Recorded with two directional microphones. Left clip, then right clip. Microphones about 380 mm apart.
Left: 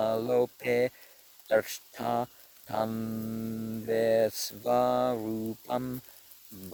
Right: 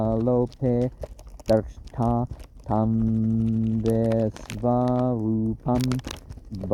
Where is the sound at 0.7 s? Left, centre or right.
Left.